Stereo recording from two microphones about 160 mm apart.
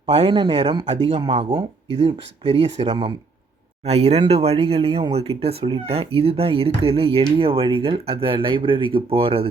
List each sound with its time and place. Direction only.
0.0 s speech: 35° right (ahead or behind)